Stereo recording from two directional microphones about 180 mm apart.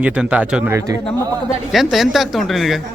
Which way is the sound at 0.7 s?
15° right (ahead or behind).